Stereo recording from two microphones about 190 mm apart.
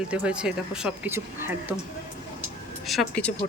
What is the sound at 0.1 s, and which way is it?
A woman's voice, 5° right (ahead or behind).